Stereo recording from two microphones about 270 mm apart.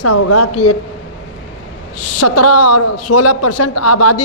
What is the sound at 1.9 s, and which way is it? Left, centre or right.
A man's voice, left.